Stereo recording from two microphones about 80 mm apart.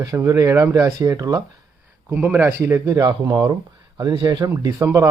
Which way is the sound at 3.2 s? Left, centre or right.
Right.